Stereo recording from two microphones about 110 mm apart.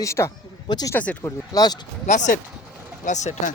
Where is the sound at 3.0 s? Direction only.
90° left.